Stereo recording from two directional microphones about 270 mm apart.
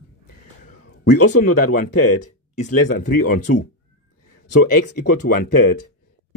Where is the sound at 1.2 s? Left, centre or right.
Left.